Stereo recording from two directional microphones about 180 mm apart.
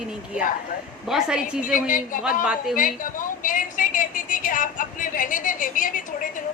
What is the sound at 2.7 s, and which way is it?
A woman's voice, 50° left (ahead or behind).